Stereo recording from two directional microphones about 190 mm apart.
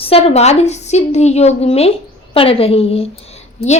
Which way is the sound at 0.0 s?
30° left (ahead or behind).